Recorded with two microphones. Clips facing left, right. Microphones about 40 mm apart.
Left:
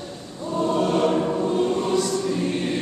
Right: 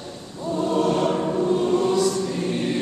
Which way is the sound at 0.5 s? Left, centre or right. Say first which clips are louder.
Even; centre.